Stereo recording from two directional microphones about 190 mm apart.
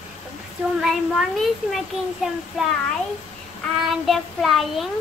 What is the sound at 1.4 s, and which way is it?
Child singing, centre (ahead or behind).